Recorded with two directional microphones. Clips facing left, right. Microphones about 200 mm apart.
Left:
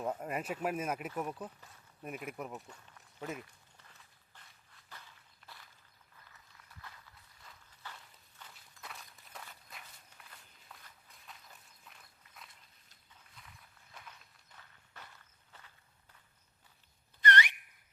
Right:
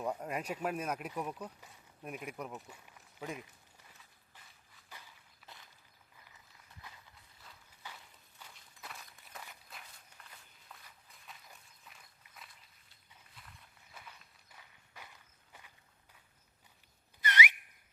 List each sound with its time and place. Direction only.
0.0 s speech: 5° left (ahead or behind)
4.9 s walk: 10° right (ahead or behind)
7.8 s walk: 10° right (ahead or behind)
13.4 s a sound: 5° right (ahead or behind)
14.5 s walk: 10° right (ahead or behind)
17.2 s whistle: 5° right (ahead or behind)